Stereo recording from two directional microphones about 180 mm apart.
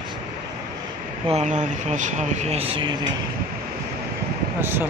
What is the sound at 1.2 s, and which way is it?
Speech, 40° right (ahead or behind).